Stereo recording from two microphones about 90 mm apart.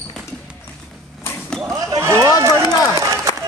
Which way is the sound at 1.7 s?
35° right (ahead or behind).